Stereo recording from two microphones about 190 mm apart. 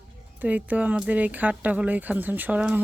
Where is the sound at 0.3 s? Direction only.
10° right (ahead or behind).